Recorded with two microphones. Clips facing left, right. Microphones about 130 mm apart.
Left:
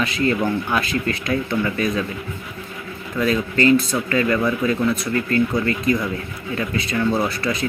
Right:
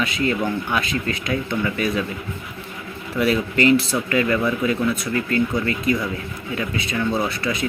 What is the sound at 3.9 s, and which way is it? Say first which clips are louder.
Speech: even; 10° right (ahead or behind).